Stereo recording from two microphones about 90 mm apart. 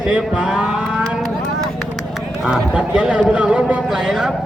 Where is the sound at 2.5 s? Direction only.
10° right (ahead or behind).